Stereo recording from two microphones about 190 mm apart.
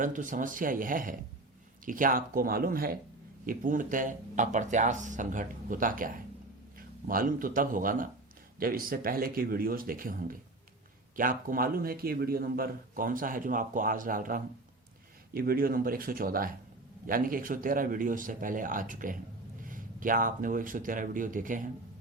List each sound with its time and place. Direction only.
0.0 s a man's voice: 45° right (ahead or behind)